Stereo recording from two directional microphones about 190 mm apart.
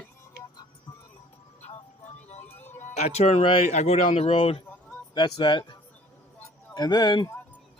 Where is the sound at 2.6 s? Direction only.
10° left (ahead or behind).